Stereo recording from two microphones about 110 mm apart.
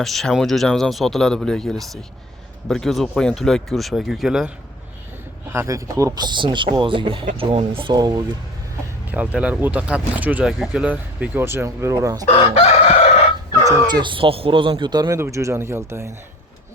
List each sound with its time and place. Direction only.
0.0 s speech: centre (ahead or behind)
5.5 s speech: 30° right (ahead or behind); by 7.9 s 55° right (ahead or behind)
7.9 s speech: 35° right (ahead or behind)
9.0 s speech: 15° right (ahead or behind); by 12.2 s 35° right (ahead or behind)
12.4 s chicken: 65° left (ahead or behind)
13.7 s speech: 40° right (ahead or behind)
15.0 s speech: 25° right (ahead or behind)